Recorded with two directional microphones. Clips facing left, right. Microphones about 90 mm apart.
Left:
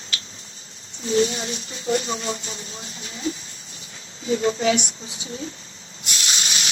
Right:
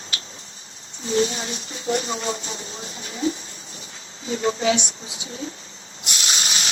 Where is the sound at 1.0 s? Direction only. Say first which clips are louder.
Left 1 dB; 30° right (ahead or behind).